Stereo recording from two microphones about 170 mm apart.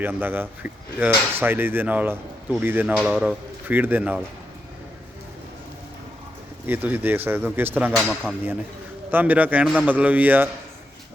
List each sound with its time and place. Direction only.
0.0 s speech: 10° right (ahead or behind)
2.9 s speech: centre (ahead or behind)
3.7 s speech: 10° right (ahead or behind)
6.7 s speech: 10° right (ahead or behind)
9.1 s speech: 10° right (ahead or behind)